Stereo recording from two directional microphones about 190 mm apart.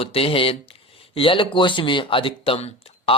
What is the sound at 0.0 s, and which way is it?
Speech, 30° left (ahead or behind).